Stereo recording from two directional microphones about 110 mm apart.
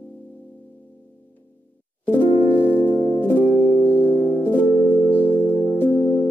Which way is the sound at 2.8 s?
15° left (ahead or behind).